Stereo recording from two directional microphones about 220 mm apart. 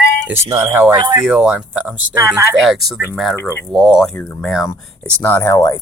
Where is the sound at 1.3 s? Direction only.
5° right (ahead or behind).